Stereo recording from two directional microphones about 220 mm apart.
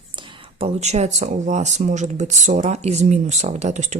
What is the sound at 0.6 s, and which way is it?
Speech, 30° right (ahead or behind).